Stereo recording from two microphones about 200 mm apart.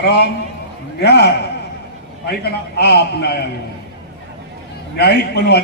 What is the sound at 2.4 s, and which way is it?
A man's voice, 55° left (ahead or behind).